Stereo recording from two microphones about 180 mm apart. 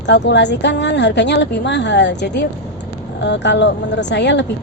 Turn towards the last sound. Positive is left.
turn(degrees=75)  # may be behind; listen again after turning